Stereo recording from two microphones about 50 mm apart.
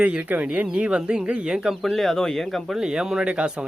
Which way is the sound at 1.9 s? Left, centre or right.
Centre.